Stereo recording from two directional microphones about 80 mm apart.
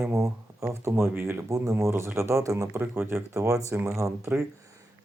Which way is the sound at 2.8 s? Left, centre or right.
Right.